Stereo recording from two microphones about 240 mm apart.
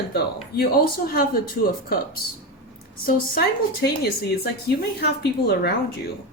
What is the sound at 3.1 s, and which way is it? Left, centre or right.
Speech, left.